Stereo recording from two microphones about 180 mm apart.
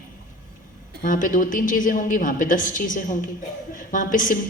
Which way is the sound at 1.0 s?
50° left (ahead or behind).